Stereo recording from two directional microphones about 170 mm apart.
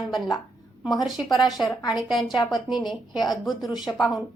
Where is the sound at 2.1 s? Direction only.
Centre (ahead or behind).